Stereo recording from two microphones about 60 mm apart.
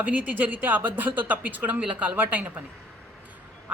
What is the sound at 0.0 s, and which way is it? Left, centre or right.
Speech, right.